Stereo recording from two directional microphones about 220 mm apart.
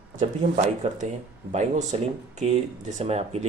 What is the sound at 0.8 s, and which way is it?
Speech, 30° right (ahead or behind).